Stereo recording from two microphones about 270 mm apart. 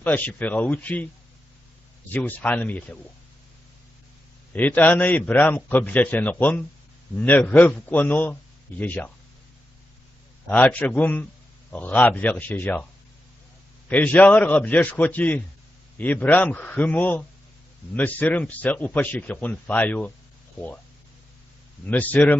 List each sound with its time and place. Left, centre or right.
0.0 s speech: centre
2.1 s a man's voice: centre
4.6 s a man's voice: centre
10.5 s a man's voice: centre
13.8 s a man's voice: centre
21.8 s a man's voice: centre